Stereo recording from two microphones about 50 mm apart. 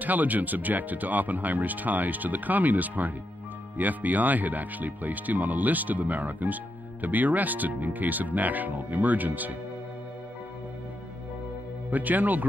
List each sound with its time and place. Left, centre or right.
0.0 s speech: right
11.9 s speech: right